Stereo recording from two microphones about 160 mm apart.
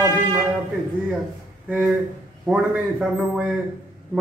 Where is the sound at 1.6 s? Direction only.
10° right (ahead or behind).